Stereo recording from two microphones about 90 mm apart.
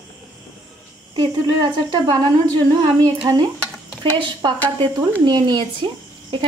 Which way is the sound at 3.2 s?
45° right (ahead or behind).